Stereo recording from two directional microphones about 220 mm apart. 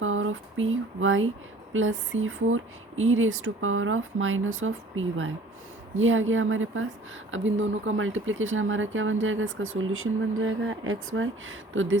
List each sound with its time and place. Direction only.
0.0 s speech: 65° right (ahead or behind)